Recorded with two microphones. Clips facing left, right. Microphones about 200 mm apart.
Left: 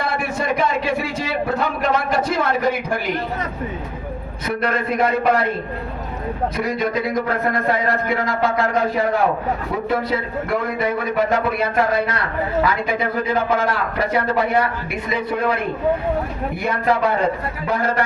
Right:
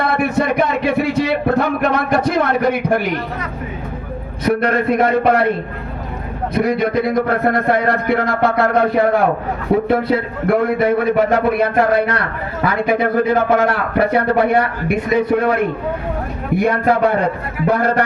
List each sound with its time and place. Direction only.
0.0 s a sound: 60° right (ahead or behind)
4.7 s speech: 55° right (ahead or behind)
6.5 s a man's voice: 60° right (ahead or behind)
16.6 s a man's voice: 50° right (ahead or behind)